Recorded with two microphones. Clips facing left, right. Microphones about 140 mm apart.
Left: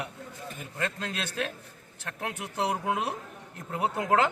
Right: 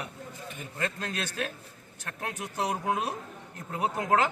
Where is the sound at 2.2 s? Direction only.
20° left (ahead or behind).